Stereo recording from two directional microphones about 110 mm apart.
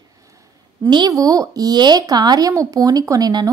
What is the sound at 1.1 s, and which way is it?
A woman's voice, 30° right (ahead or behind).